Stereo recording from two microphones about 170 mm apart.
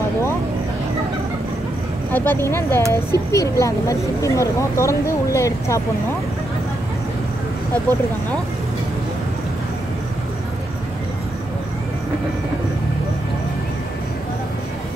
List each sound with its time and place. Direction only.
2.1 s speech: 10° left (ahead or behind)